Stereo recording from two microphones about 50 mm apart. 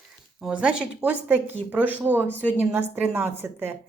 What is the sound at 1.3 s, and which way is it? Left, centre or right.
A woman's voice, right.